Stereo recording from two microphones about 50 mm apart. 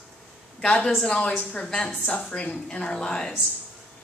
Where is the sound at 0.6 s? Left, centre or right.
Left.